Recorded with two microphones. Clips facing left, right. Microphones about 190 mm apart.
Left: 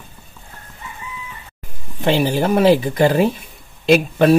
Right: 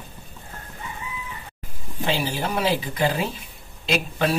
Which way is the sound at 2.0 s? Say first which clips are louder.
Left 8 dB; 55° left (ahead or behind).